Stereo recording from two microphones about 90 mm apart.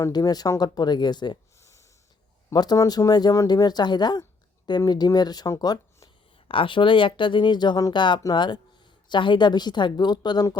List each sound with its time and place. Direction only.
0.1 s a woman's voice: 45° left (ahead or behind)
1.6 s wheeze: 35° left (ahead or behind)
2.5 s a woman's voice: 50° left (ahead or behind)
6.5 s a woman's voice: 70° left (ahead or behind); by 10.6 s 50° left (ahead or behind)